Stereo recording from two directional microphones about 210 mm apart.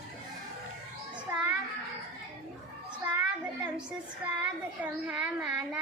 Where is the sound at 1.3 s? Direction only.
15° right (ahead or behind).